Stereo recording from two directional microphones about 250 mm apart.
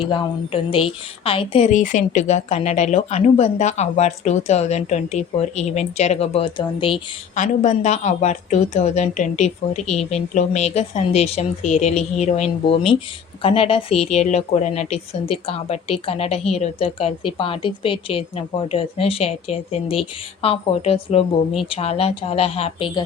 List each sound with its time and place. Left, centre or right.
0.0 s a woman's voice: left